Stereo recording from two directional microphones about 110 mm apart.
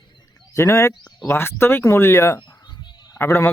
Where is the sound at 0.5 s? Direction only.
25° left (ahead or behind).